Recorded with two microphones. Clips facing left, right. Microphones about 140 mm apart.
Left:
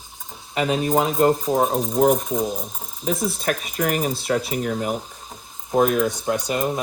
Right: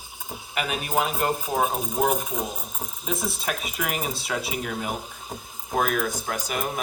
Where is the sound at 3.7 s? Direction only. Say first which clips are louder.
Left 7 dB; 45° left (ahead or behind).